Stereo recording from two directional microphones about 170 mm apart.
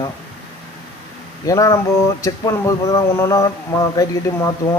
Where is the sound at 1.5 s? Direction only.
20° left (ahead or behind).